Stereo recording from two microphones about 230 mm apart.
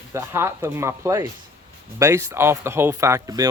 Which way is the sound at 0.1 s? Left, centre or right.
Centre.